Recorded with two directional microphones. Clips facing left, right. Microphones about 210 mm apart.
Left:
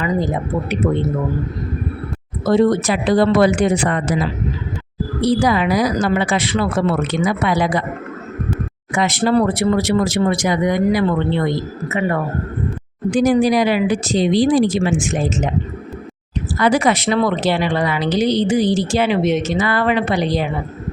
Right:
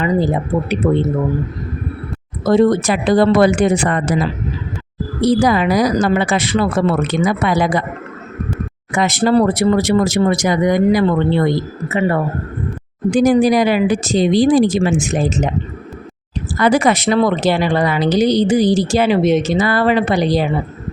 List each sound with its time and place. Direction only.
0.0 s speech: 30° right (ahead or behind)
2.5 s speech: 45° right (ahead or behind)
5.2 s speech: 45° right (ahead or behind)
9.0 s speech: 45° right (ahead or behind)
13.1 s speech: 45° right (ahead or behind)
16.6 s speech: 45° right (ahead or behind)